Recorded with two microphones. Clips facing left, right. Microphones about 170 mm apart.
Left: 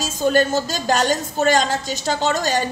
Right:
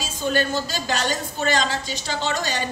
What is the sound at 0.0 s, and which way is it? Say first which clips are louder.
A woman's voice: left 6 dB; 45° left (ahead or behind).